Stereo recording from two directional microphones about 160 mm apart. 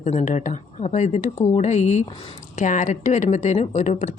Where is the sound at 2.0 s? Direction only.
30° left (ahead or behind).